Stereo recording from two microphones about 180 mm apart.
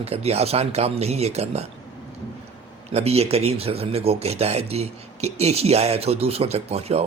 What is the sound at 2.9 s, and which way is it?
Speech, 35° right (ahead or behind).